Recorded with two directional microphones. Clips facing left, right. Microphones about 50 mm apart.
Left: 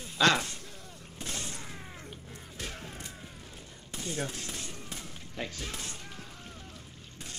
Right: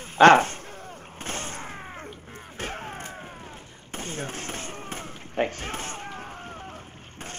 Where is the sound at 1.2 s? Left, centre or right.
Right.